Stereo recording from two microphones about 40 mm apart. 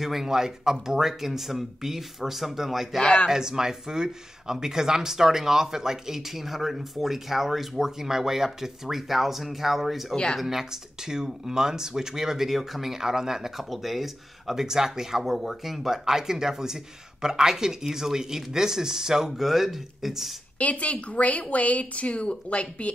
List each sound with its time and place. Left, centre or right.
0.0 s speech: centre
3.0 s speech: left
3.3 s speech: centre
20.5 s speech: left